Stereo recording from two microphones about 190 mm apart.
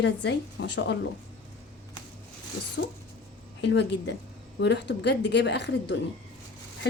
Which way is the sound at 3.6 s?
65° left (ahead or behind).